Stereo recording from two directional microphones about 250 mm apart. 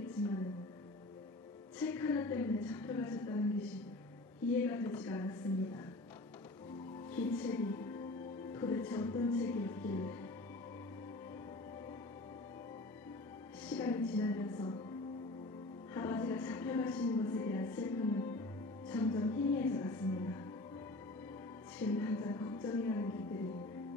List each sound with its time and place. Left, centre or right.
0.0 s a sound: centre
1.8 s a woman's voice: centre
7.1 s speech: centre
13.7 s music: centre
15.9 s music: centre
21.7 s speech: centre